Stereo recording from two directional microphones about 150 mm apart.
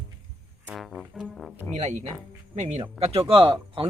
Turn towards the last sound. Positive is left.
turn(degrees=-35)  # may be behind; listen again after turning